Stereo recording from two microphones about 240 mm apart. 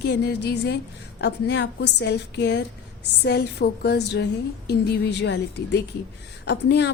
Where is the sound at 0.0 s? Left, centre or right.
Left.